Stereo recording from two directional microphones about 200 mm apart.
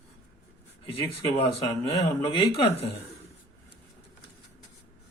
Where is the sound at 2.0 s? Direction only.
30° left (ahead or behind).